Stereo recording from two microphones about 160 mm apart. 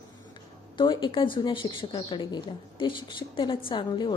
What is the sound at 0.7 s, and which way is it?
A woman's voice, 30° left (ahead or behind).